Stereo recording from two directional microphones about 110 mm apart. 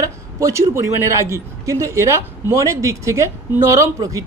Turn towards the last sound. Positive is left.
turn(degrees=-30)  # may be behind; listen again after turning